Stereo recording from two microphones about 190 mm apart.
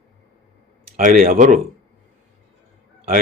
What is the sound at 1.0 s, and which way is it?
Speech, 45° right (ahead or behind).